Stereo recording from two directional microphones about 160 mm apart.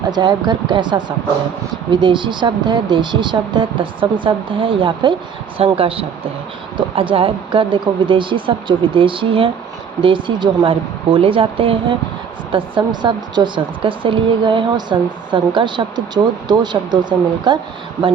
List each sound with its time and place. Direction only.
0.1 s speech: 25° right (ahead or behind)